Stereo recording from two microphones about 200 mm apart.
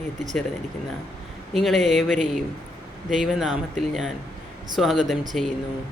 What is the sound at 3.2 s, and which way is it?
Speech, centre (ahead or behind).